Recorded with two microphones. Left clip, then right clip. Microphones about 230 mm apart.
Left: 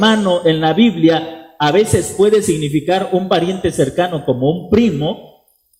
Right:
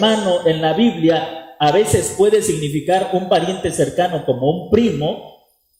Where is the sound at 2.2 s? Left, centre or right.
Left.